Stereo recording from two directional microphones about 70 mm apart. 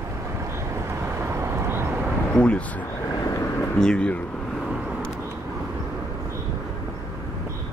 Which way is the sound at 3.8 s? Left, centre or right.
Centre.